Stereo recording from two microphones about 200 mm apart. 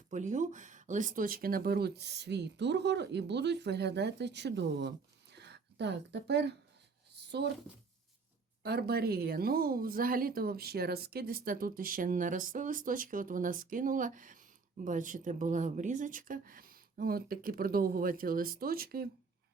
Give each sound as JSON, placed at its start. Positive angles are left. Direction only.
{"t": 0.1, "sound": "speech", "side_deg": -40}
{"t": 8.6, "sound": "speech", "side_deg": -50}